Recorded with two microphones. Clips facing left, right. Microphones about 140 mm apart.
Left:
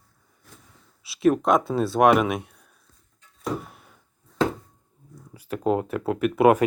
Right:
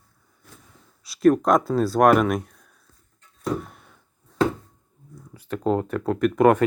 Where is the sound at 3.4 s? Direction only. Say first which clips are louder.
Right 2 dB; 5° left (ahead or behind).